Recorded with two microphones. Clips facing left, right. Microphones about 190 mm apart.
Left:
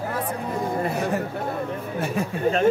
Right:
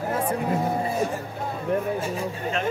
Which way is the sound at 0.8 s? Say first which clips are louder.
Left 1 dB; 65° left (ahead or behind).